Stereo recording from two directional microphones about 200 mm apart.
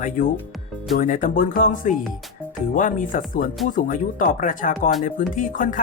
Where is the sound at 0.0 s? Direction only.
45° left (ahead or behind).